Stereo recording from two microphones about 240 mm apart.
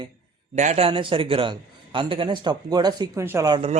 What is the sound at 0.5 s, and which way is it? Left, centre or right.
A man's voice, right.